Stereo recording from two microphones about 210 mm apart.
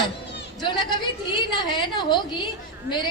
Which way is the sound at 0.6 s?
20° left (ahead or behind).